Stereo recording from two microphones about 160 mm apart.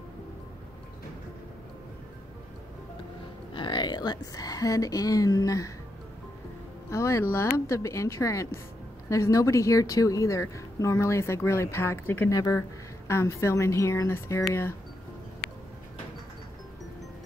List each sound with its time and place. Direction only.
3.5 s a woman's voice: 30° left (ahead or behind)
6.9 s speech: 20° left (ahead or behind)